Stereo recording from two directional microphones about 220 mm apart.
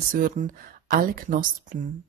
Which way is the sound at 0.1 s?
40° right (ahead or behind).